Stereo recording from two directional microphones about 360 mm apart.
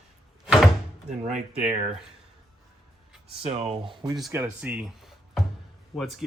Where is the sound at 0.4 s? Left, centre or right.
Centre.